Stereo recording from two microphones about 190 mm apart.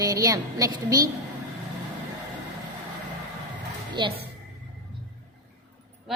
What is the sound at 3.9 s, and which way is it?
Speech, 25° right (ahead or behind).